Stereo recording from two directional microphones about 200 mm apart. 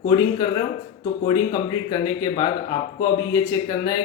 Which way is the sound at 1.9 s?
20° left (ahead or behind).